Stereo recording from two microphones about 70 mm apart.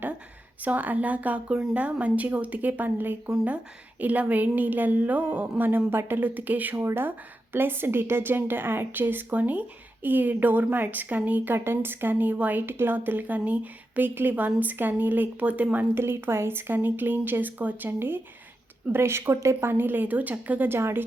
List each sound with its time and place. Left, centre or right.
0.6 s a woman's voice: right
6.7 s a woman's voice: right
16.0 s a woman's voice: right
19.5 s a woman's voice: right